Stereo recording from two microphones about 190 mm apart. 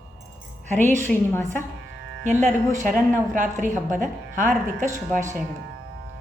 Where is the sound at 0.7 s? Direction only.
10° left (ahead or behind).